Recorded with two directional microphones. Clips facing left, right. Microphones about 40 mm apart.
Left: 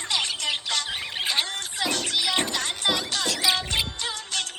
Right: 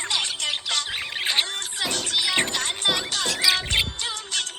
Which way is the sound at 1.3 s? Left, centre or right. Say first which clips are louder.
Right 3 dB; right.